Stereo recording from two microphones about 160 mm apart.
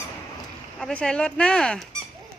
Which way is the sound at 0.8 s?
5° left (ahead or behind).